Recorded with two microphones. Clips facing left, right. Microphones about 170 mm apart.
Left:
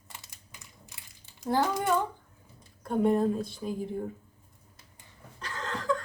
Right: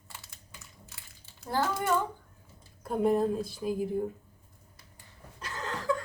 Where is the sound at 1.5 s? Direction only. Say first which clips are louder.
Left 3 dB; 15° left (ahead or behind).